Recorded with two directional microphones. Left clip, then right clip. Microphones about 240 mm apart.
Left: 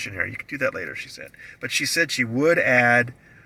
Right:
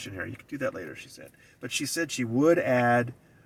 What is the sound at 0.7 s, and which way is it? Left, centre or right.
Speech, right.